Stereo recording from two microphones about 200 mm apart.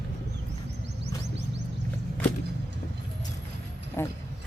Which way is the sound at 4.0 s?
10° left (ahead or behind).